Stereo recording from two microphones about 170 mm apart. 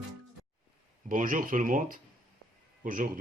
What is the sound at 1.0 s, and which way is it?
Speech, 50° right (ahead or behind).